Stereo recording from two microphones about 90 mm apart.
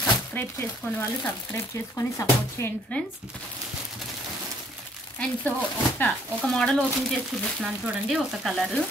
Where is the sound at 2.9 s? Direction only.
15° left (ahead or behind).